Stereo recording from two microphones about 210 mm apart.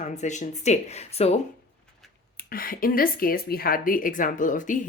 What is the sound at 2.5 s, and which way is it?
A woman's voice, 45° left (ahead or behind).